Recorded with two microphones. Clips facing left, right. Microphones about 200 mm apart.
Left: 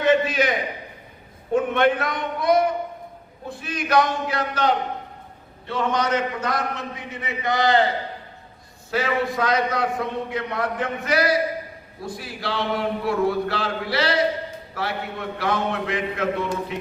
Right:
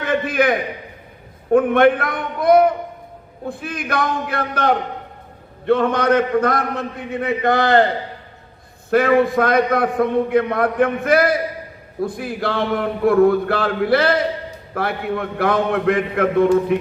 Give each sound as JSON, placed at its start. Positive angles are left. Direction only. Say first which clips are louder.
{"t": 0.0, "sound": "a man's voice", "louder": "right 1 dB", "side_deg": -55}
{"t": 8.9, "sound": "a man's voice", "louder": "right 9 dB", "side_deg": -55}